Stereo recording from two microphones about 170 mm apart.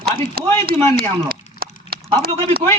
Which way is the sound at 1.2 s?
60° right (ahead or behind).